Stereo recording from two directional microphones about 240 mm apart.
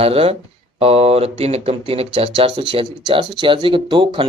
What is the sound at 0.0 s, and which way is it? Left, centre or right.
Speech, right.